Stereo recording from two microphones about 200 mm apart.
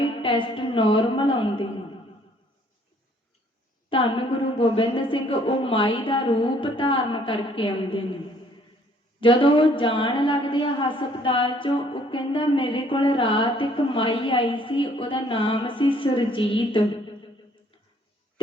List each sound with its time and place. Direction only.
0.0 s a woman's voice: 25° left (ahead or behind)
3.8 s a woman's voice: 25° left (ahead or behind)
9.2 s a woman's voice: 25° left (ahead or behind)